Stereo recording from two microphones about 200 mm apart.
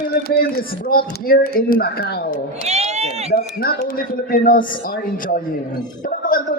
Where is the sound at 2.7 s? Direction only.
35° right (ahead or behind).